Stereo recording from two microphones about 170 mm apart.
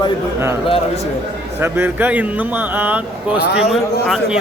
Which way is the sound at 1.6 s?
15° right (ahead or behind).